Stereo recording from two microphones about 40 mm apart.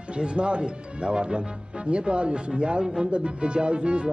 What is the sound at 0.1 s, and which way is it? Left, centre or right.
Speech, right.